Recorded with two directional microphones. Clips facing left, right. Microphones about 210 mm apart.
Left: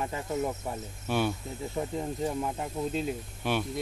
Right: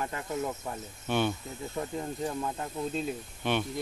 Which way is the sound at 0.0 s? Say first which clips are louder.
Left 2 dB; 20° left (ahead or behind).